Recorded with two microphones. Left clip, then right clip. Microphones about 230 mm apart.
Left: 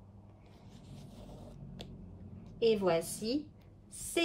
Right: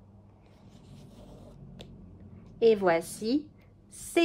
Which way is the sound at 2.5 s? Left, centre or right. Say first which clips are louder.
Right 6 dB; right.